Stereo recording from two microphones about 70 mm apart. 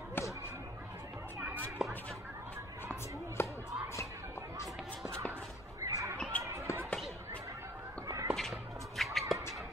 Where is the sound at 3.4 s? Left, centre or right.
Left.